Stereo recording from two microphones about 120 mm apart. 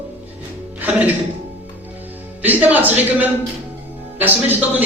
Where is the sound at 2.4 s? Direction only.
15° right (ahead or behind).